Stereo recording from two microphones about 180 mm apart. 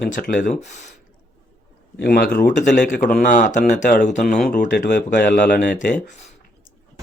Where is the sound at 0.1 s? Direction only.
45° left (ahead or behind).